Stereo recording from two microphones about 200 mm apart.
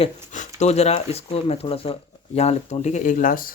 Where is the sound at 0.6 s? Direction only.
30° left (ahead or behind).